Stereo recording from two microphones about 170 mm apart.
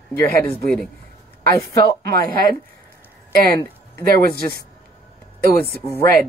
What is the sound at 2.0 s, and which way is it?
Speech, 60° right (ahead or behind).